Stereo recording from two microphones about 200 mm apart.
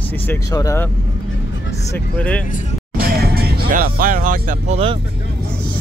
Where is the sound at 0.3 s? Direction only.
15° left (ahead or behind).